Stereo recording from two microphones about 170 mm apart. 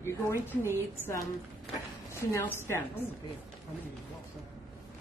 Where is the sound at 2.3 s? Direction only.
15° left (ahead or behind).